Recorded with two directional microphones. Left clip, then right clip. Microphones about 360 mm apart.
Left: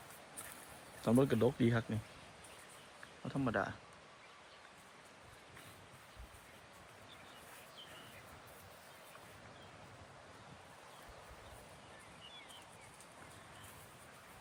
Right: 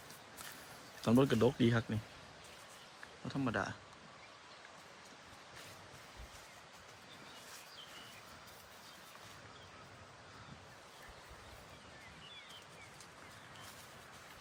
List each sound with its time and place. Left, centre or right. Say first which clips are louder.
1.0 s speech: right 1 dB; centre
3.2 s speech: left 1 dB; centre